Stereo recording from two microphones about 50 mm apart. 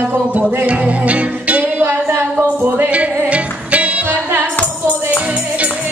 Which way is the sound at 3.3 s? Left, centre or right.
Right.